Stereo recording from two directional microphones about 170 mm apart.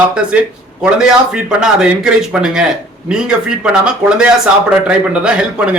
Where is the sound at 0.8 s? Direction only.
5° right (ahead or behind).